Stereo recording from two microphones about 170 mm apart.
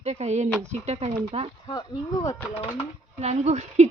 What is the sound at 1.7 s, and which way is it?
Speech, 20° left (ahead or behind).